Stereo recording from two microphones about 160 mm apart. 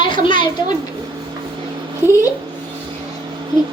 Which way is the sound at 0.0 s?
30° left (ahead or behind).